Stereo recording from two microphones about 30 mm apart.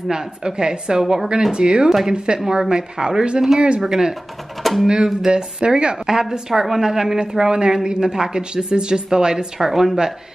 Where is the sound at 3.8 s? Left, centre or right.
Centre.